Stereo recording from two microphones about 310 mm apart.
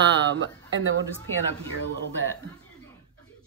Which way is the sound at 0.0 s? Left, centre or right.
Right.